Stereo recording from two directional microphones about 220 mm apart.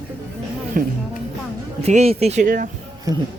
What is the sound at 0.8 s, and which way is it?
Speech, 40° right (ahead or behind).